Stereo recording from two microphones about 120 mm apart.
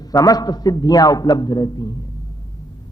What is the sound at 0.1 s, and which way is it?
Mantra, 30° left (ahead or behind).